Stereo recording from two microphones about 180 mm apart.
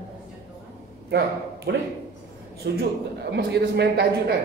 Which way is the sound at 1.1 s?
65° right (ahead or behind).